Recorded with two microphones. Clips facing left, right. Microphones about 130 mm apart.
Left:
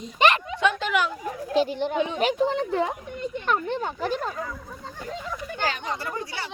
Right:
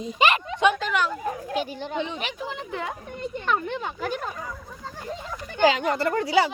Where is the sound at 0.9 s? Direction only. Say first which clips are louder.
Left 1 dB; 5° left (ahead or behind).